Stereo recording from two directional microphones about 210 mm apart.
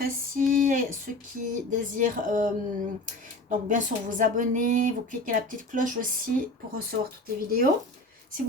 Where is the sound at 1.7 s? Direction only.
40° right (ahead or behind).